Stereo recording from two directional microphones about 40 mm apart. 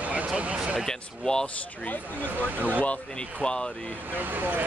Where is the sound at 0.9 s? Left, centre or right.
Centre.